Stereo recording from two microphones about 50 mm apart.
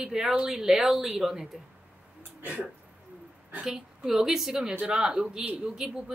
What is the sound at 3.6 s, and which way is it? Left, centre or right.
A woman's voice, centre.